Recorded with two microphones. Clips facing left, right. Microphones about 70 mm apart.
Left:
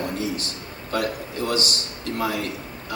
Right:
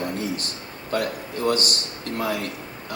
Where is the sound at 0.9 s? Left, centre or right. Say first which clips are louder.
Even; right.